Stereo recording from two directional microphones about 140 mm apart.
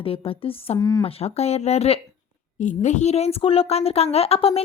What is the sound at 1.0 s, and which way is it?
Speech, 45° left (ahead or behind).